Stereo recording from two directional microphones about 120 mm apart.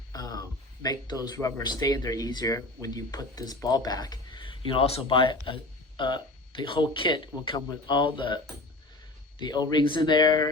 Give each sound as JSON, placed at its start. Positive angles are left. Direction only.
{"t": 0.1, "sound": "speech", "side_deg": 35}
{"t": 9.4, "sound": "speech", "side_deg": 35}